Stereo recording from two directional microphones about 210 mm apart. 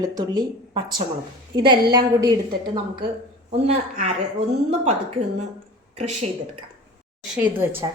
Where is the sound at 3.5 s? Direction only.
30° right (ahead or behind).